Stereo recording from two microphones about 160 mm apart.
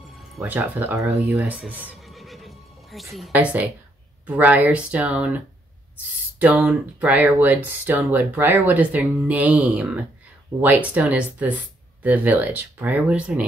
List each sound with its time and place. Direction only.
0.1 s music: centre (ahead or behind)
0.6 s speech: 15° right (ahead or behind)
1.6 s neigh: 10° right (ahead or behind)
4.4 s speech: 10° right (ahead or behind)
6.4 s speech: 10° right (ahead or behind)